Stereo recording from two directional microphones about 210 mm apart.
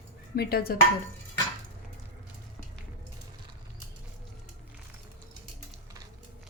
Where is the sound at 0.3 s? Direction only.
45° left (ahead or behind).